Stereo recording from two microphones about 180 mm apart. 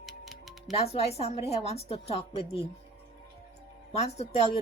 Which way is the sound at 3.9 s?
35° left (ahead or behind).